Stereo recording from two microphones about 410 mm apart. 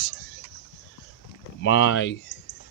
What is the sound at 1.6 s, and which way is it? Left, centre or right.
Speech, left.